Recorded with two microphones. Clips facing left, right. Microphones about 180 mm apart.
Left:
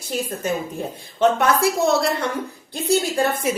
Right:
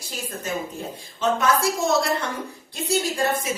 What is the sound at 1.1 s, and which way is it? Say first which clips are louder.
A woman's voice: left 4 dB; 60° left (ahead or behind).